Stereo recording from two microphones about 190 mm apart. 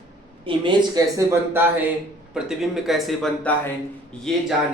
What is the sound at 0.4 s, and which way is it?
Speech, 25° right (ahead or behind).